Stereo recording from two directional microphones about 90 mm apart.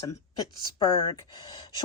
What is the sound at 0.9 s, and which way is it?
Speech, 50° left (ahead or behind).